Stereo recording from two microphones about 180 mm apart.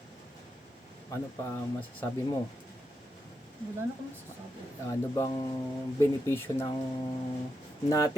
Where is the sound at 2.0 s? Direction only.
15° left (ahead or behind).